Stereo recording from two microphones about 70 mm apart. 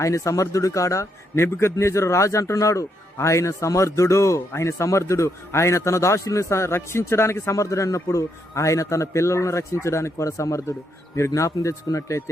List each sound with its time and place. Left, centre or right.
0.0 s a man's voice: left